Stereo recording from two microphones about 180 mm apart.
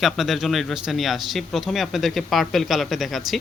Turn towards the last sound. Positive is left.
turn(degrees=0)  # may be behind; listen again after turning